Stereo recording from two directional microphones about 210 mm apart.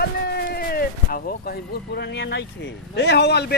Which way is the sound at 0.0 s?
50° left (ahead or behind).